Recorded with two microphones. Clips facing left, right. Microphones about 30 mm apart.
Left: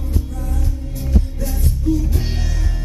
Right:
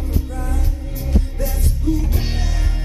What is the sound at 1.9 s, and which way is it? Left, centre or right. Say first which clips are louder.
Music: left 2 dB; right.